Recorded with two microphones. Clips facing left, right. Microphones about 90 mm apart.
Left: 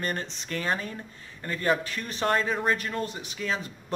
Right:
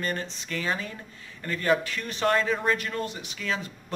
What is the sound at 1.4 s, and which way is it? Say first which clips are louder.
A man's voice: right 1 dB; 25° left (ahead or behind).